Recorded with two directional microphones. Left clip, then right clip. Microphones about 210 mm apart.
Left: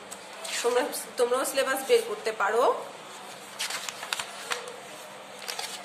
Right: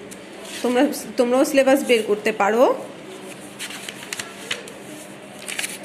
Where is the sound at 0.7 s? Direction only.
30° right (ahead or behind).